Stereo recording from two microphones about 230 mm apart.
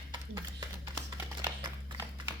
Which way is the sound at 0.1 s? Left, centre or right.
Centre.